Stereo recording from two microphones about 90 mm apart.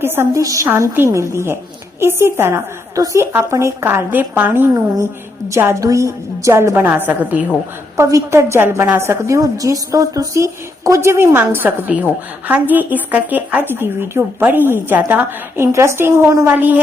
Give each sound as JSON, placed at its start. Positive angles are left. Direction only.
{"t": 0.0, "sound": "a woman's voice", "side_deg": -25}
{"t": 0.4, "sound": "a woman's voice", "side_deg": -35}
{"t": 3.8, "sound": "a woman's voice", "side_deg": -20}
{"t": 7.9, "sound": "a woman's voice", "side_deg": -35}
{"t": 11.3, "sound": "a woman's voice", "side_deg": -20}
{"t": 16.5, "sound": "a woman's voice", "side_deg": -20}